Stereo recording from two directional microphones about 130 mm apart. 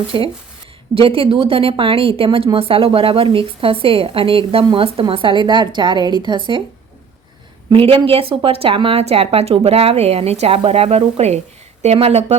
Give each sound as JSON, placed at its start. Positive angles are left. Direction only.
{"t": 0.1, "sound": "a woman's voice", "side_deg": -35}
{"t": 7.7, "sound": "a woman's voice", "side_deg": -45}